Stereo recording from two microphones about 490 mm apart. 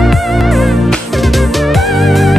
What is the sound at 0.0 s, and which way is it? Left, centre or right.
Music, centre.